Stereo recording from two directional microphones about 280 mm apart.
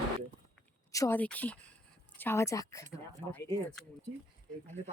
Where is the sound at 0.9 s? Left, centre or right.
Centre.